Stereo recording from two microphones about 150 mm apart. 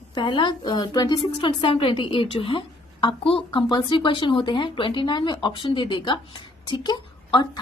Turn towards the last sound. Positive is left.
turn(degrees=30)  # may be behind; listen again after turning